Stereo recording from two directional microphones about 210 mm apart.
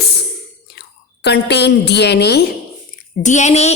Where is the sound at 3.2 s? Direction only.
35° left (ahead or behind).